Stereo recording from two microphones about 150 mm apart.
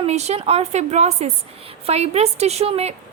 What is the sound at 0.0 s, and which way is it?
A woman's voice, 45° right (ahead or behind).